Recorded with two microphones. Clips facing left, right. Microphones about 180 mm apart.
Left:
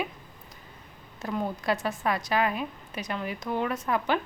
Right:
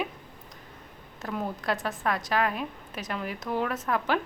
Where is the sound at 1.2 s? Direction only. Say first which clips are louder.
Left 2 dB; centre (ahead or behind).